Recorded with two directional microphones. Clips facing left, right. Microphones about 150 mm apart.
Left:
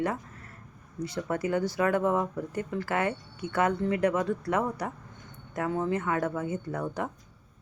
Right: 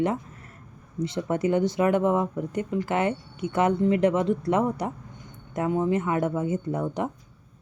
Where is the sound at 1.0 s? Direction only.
25° right (ahead or behind).